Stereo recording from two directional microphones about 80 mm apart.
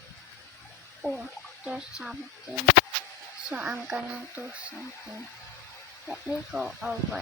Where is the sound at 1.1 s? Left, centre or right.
Centre.